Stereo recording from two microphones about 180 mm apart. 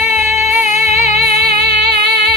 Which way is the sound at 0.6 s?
40° left (ahead or behind).